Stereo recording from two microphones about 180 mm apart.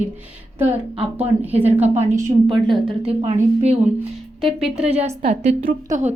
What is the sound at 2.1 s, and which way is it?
Speech, 15° right (ahead or behind).